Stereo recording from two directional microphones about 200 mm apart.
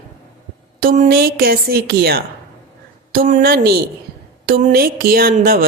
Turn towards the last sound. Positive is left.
turn(degrees=-45)  # may be behind; listen again after turning